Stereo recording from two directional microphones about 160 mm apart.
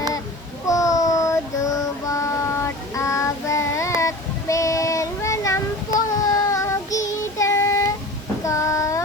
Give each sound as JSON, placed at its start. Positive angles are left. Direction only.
{"t": 0.7, "sound": "child singing", "side_deg": 20}